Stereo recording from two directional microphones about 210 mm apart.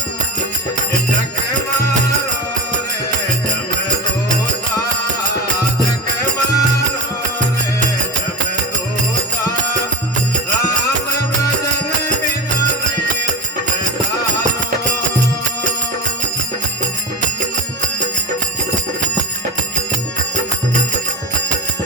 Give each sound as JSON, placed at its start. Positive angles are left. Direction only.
{"t": 6.5, "sound": "music", "side_deg": 15}